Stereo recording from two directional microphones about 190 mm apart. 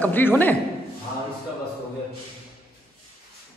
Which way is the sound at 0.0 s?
10° left (ahead or behind).